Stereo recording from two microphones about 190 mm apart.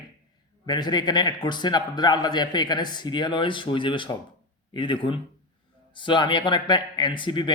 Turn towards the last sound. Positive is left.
turn(degrees=25)  # may be behind; listen again after turning